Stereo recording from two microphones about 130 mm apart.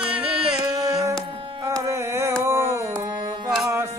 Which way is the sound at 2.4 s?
20° right (ahead or behind).